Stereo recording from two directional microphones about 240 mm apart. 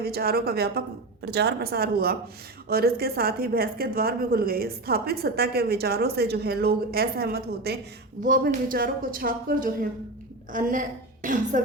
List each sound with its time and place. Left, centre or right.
0.0 s a woman's voice: right